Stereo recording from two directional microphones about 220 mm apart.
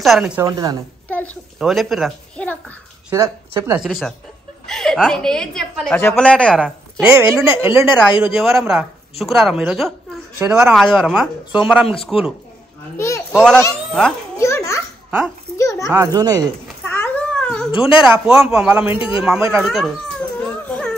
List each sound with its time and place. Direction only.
0.0 s a woman's voice: centre (ahead or behind)
0.4 s speech: 15° right (ahead or behind)
1.0 s a child's voice: 5° left (ahead or behind)
3.1 s a woman's voice: 15° right (ahead or behind)
12.9 s a child's voice: 10° left (ahead or behind)
14.4 s children playing: 15° left (ahead or behind)
15.2 s a child's voice: 15° left (ahead or behind)
15.9 s speech: 15° right (ahead or behind)
16.6 s cat: 10° left (ahead or behind)
17.6 s speech: 25° left (ahead or behind)
18.0 s a woman's voice: centre (ahead or behind)
18.9 s speech: 20° left (ahead or behind)
19.2 s cat: 5° right (ahead or behind)